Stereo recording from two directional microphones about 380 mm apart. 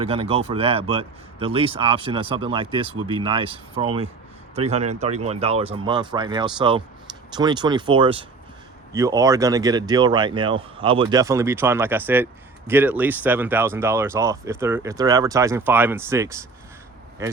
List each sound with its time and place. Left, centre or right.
0.0 s speech: centre